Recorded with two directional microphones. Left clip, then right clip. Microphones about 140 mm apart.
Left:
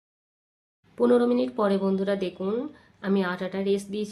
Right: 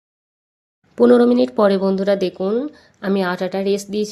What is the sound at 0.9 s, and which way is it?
Speech, 55° right (ahead or behind).